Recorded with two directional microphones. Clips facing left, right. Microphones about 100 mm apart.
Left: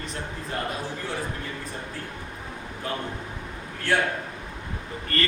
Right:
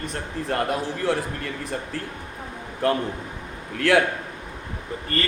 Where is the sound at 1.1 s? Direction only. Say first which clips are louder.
Right 6 dB; 75° right (ahead or behind).